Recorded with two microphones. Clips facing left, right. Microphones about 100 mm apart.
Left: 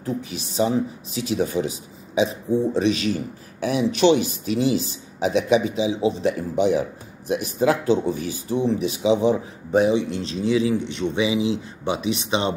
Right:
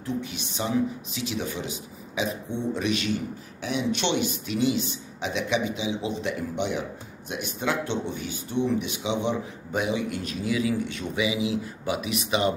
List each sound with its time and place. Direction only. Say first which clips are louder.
0.0 s speech: left 3 dB; 35° left (ahead or behind)